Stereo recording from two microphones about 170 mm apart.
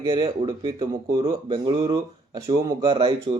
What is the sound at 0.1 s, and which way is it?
Speech, 30° right (ahead or behind).